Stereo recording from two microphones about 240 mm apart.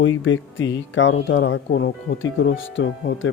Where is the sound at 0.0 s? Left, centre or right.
Left.